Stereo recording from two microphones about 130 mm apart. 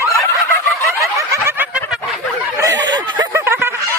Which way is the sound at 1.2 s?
20° right (ahead or behind).